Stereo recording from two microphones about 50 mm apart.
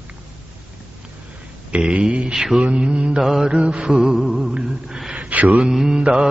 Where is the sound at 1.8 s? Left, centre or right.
Centre.